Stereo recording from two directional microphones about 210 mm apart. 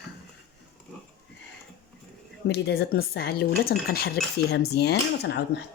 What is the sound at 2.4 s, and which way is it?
Speech, 55° left (ahead or behind).